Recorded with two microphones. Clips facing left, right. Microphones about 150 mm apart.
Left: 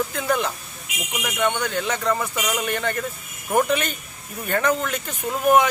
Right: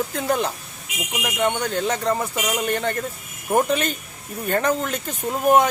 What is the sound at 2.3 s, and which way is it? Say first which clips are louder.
Speech: right 1 dB; 20° right (ahead or behind).